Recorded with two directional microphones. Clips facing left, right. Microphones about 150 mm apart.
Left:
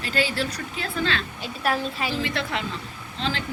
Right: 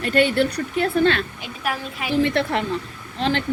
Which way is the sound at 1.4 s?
10° right (ahead or behind).